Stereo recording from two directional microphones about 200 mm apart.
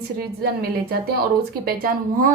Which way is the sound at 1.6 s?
45° right (ahead or behind).